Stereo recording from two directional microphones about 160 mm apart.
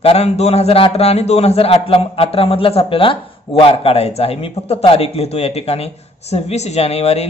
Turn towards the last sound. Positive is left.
turn(degrees=40)  # may be behind; listen again after turning